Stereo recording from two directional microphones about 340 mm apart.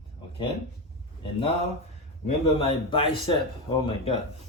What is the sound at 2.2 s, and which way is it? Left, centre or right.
A man's voice, centre.